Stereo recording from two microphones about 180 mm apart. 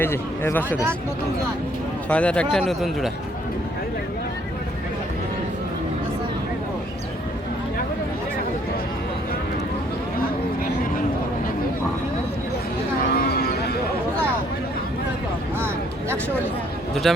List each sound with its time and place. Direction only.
0.0 s speech: 15° left (ahead or behind)
2.0 s speech: 5° left (ahead or behind)
13.1 s a sound: 60° left (ahead or behind)
16.9 s speech: centre (ahead or behind)